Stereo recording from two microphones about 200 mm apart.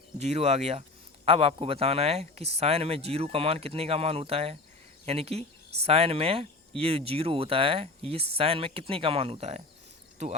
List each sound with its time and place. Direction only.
0.2 s speech: 35° right (ahead or behind)